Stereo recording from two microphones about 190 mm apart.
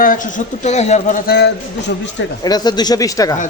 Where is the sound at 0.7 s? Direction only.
35° left (ahead or behind).